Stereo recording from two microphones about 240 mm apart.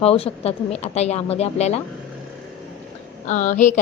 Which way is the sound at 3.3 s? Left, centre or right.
Left.